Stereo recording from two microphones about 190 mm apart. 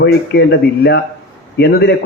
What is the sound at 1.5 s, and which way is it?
Speech, 60° left (ahead or behind).